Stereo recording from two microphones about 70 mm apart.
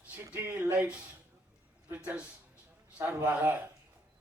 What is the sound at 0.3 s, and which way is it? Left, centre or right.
Speech, right.